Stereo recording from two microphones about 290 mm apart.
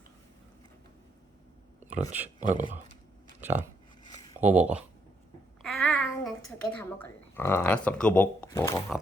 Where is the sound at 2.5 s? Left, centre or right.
Right.